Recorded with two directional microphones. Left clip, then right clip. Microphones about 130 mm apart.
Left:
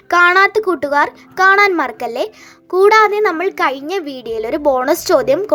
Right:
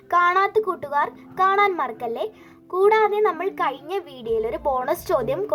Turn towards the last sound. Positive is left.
turn(degrees=20)  # may be behind; listen again after turning